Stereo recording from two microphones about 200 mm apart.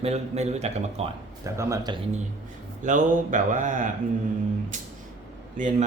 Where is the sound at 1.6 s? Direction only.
20° right (ahead or behind).